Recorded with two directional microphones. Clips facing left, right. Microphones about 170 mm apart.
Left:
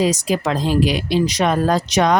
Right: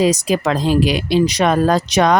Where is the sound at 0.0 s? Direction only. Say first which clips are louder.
Right 3 dB; 70° right (ahead or behind).